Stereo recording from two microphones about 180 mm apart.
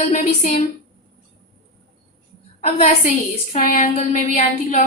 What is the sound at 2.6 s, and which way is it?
A woman's voice, 35° left (ahead or behind).